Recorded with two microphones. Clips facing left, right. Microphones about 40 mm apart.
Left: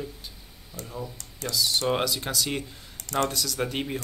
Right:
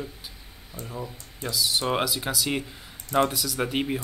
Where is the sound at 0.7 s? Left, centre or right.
Right.